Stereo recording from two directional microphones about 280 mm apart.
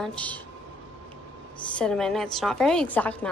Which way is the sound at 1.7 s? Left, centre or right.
Centre.